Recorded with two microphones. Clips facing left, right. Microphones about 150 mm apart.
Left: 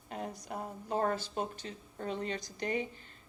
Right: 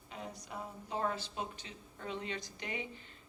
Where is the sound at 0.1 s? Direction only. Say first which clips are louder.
Left 5 dB; 50° left (ahead or behind).